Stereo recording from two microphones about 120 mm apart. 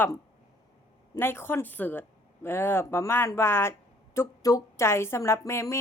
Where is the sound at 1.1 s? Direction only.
20° left (ahead or behind).